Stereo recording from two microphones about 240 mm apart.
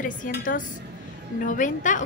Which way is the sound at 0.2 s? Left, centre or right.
Left.